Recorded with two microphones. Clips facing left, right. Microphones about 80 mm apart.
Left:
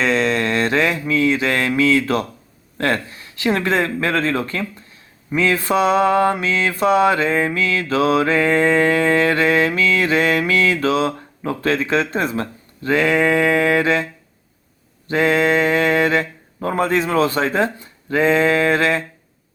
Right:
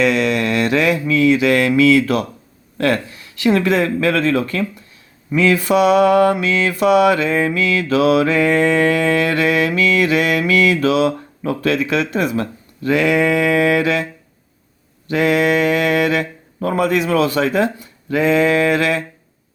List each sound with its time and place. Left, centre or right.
0.0 s mantra: left
2.7 s speech: left
3.1 s mantra: left
15.0 s mantra: left